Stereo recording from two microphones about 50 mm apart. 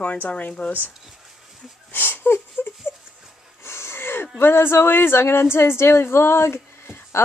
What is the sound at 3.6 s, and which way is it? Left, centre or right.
Wheeze, left.